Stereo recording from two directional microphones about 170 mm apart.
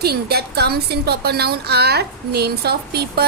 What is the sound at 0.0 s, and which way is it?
A woman's voice, 70° right (ahead or behind).